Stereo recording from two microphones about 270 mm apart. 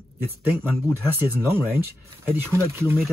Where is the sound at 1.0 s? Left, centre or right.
Centre.